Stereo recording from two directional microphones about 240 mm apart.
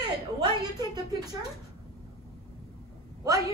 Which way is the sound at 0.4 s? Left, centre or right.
Centre.